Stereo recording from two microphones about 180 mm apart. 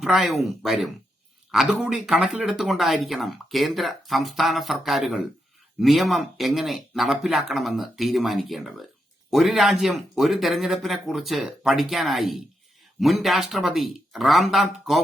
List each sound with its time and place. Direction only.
0.0 s speech: centre (ahead or behind)